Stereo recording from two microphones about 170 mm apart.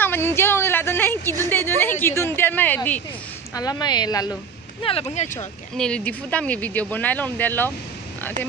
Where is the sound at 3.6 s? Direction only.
25° left (ahead or behind).